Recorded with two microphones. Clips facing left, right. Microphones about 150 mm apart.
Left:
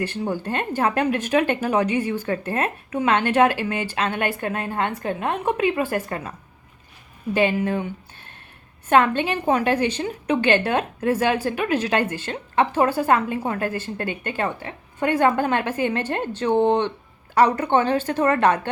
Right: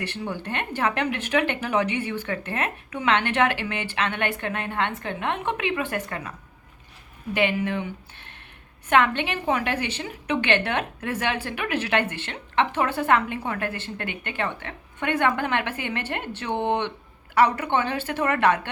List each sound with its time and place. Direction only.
0.3 s speech: 40° left (ahead or behind)
7.3 s speech: 40° left (ahead or behind)
8.9 s speech: 40° left (ahead or behind)
16.5 s speech: 15° left (ahead or behind)
17.3 s a woman's voice: 45° left (ahead or behind)